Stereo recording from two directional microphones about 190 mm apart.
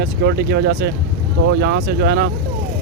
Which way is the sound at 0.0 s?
60° right (ahead or behind).